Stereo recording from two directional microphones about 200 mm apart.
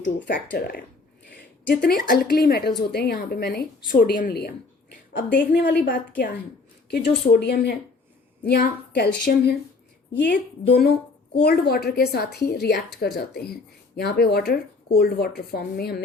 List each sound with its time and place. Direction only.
0.0 s a woman's voice: 55° left (ahead or behind)
10.7 s speech: 50° left (ahead or behind)